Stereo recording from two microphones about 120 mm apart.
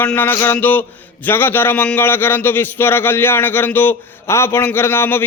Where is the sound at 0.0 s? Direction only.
15° left (ahead or behind).